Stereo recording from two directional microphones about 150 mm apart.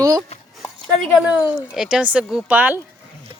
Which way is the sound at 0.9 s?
Centre (ahead or behind).